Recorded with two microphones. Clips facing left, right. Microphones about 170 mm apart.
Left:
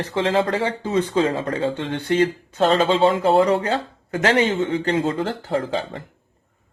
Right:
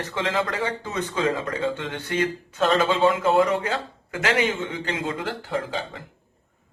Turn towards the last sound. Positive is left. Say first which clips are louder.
# left 5 dB
turn(degrees=40)  # may be behind; listen again after turning